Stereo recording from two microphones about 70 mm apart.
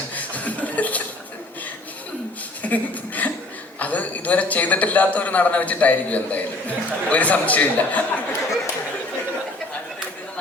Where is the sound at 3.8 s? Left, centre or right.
Left.